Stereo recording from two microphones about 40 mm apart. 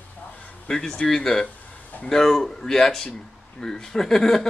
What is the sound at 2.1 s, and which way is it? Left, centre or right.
Speech, centre.